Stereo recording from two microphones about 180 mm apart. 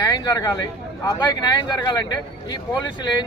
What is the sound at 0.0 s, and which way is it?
Speech, 20° left (ahead or behind).